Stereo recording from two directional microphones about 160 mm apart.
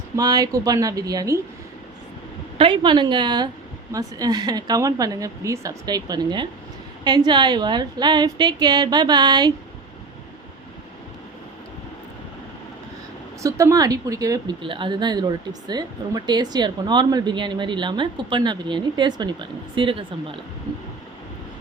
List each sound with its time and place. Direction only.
0.2 s speech: 25° right (ahead or behind)
2.6 s speech: 30° right (ahead or behind)
13.4 s speech: 20° right (ahead or behind)